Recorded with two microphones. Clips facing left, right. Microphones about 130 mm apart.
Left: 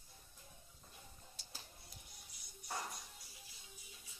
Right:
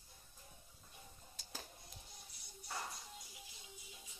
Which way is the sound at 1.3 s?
45° right (ahead or behind).